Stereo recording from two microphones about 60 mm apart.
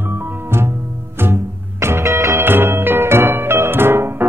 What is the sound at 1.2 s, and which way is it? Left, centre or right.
Music, right.